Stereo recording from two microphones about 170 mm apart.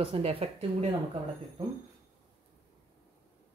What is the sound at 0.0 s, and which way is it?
Speech, 35° right (ahead or behind).